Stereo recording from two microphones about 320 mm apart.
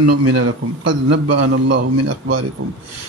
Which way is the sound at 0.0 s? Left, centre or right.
Right.